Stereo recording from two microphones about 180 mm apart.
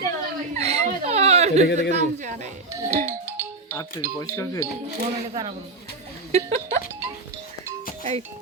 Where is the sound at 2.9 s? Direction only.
55° right (ahead or behind).